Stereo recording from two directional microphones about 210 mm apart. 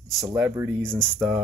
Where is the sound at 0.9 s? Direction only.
Centre (ahead or behind).